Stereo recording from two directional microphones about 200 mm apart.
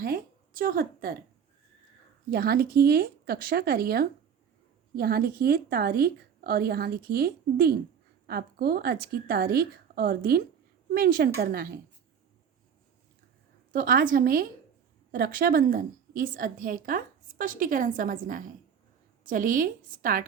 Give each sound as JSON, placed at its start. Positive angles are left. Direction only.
{"t": 0.0, "sound": "a woman's voice", "side_deg": -45}
{"t": 2.3, "sound": "a woman's voice", "side_deg": -50}
{"t": 13.7, "sound": "a woman's voice", "side_deg": -45}